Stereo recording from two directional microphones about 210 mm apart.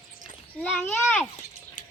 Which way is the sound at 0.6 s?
10° left (ahead or behind).